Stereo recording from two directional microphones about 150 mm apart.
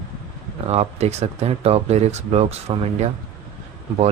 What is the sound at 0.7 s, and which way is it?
Speech, 45° right (ahead or behind).